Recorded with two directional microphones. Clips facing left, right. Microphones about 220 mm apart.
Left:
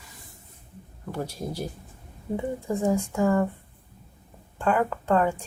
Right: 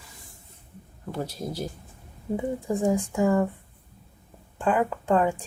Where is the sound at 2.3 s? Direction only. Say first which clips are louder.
Right 1 dB; 15° right (ahead or behind).